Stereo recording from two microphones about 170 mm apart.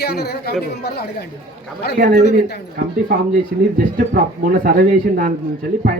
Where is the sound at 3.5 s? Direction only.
60° right (ahead or behind).